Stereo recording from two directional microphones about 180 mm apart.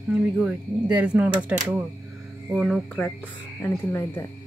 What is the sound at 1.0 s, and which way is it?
Speech, 5° right (ahead or behind).